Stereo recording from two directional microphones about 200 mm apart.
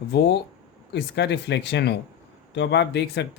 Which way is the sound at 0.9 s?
60° left (ahead or behind).